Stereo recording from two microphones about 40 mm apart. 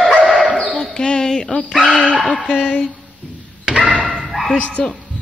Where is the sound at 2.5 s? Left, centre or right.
Left.